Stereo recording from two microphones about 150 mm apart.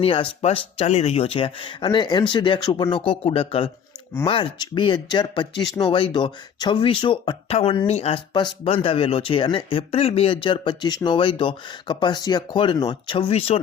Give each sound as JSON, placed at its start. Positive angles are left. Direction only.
{"t": 0.0, "sound": "speech", "side_deg": 40}